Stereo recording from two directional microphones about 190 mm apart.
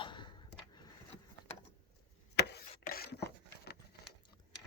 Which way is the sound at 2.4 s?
60° left (ahead or behind).